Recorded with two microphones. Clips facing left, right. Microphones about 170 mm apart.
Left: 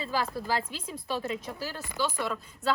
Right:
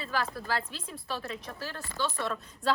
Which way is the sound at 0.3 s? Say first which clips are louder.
Left 3 dB; 15° left (ahead or behind).